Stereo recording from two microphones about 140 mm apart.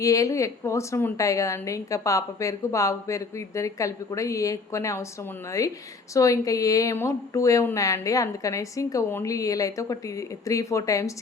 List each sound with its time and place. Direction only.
0.0 s a woman's voice: 25° left (ahead or behind)